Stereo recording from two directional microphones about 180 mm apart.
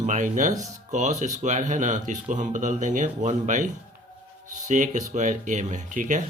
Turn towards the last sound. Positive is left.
turn(degrees=-45)  # may be behind; listen again after turning